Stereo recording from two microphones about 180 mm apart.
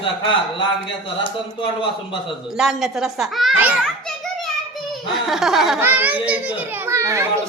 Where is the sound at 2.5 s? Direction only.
Centre (ahead or behind).